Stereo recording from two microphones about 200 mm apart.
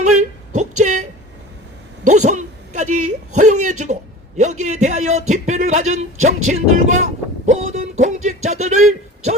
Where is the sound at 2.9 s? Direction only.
90° right.